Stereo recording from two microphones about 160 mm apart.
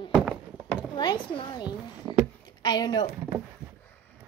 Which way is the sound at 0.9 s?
30° left (ahead or behind).